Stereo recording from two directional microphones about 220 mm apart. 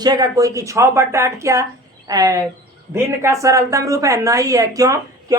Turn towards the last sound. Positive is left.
turn(degrees=-15)  # may be behind; listen again after turning